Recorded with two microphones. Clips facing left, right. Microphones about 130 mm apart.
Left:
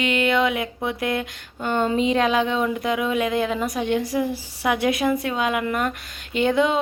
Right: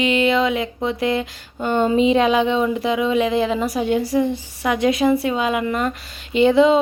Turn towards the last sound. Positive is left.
turn(degrees=0)  # may be behind; listen again after turning